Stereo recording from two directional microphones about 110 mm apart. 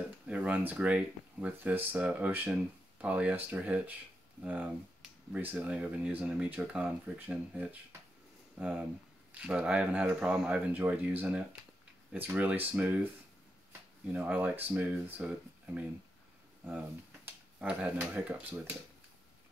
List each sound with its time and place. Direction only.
0.3 s speech: 10° right (ahead or behind)
14.1 s speech: 15° right (ahead or behind)